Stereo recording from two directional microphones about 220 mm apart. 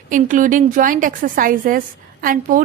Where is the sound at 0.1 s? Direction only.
35° right (ahead or behind).